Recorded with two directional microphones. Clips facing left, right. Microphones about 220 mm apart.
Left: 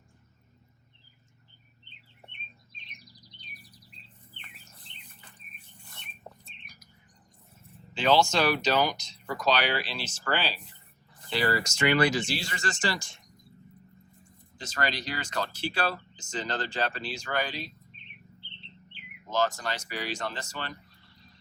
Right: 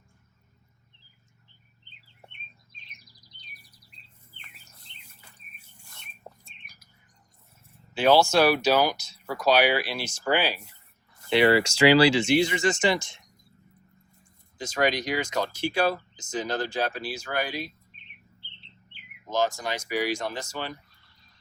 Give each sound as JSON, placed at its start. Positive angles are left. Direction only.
{"t": 7.9, "sound": "speech", "side_deg": -10}
{"t": 11.3, "sound": "speech", "side_deg": -65}
{"t": 11.9, "sound": "speech", "side_deg": -85}
{"t": 12.2, "sound": "speech", "side_deg": -20}
{"t": 14.6, "sound": "speech", "side_deg": -15}
{"t": 19.3, "sound": "speech", "side_deg": -10}